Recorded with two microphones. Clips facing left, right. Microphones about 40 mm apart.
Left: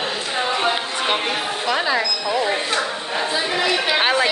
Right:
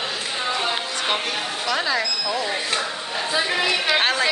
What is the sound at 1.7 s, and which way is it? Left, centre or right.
Speech, centre.